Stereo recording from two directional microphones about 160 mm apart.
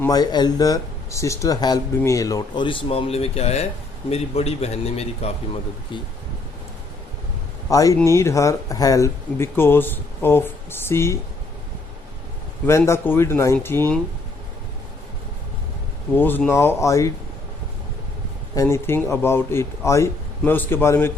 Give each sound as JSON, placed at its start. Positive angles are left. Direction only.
{"t": 0.1, "sound": "speech", "side_deg": 25}
{"t": 5.9, "sound": "speech", "side_deg": 30}
{"t": 7.7, "sound": "speech", "side_deg": 20}
{"t": 12.6, "sound": "speech", "side_deg": 15}
{"t": 16.1, "sound": "speech", "side_deg": 10}
{"t": 18.5, "sound": "speech", "side_deg": 15}